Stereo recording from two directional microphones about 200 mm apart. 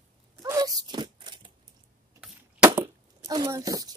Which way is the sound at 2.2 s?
10° right (ahead or behind).